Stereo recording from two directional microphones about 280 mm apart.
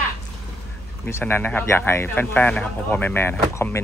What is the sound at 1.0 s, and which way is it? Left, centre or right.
Speech, centre.